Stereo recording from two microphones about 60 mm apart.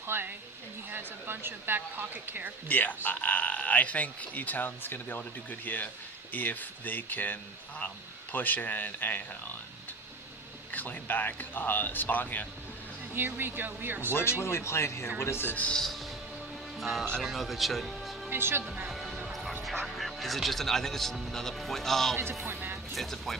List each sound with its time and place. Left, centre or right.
0.1 s a woman's voice: right
2.6 s speech: left
10.7 s speech: left
13.1 s a woman's voice: right
14.1 s speech: left
15.4 s speech: left
15.7 s speech: centre
18.3 s a woman's voice: right
18.9 s music: centre
19.6 s speech: centre
22.4 s music: right
23.0 s speech: centre